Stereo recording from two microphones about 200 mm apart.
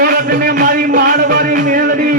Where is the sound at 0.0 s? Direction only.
50° right (ahead or behind).